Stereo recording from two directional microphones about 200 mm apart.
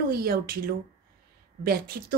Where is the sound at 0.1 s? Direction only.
50° right (ahead or behind).